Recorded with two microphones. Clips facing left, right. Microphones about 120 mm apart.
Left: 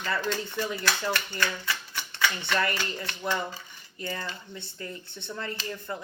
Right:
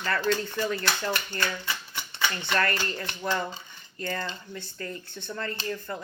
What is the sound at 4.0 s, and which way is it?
Speech, 10° left (ahead or behind).